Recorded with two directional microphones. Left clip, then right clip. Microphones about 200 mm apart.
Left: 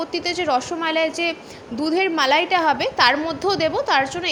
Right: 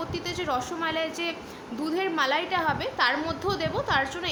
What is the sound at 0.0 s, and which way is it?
A woman's voice, 30° left (ahead or behind).